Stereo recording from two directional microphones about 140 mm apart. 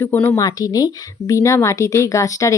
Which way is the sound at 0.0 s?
15° left (ahead or behind).